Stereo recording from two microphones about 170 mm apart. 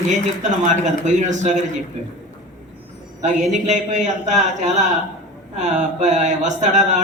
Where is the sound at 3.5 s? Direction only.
45° right (ahead or behind).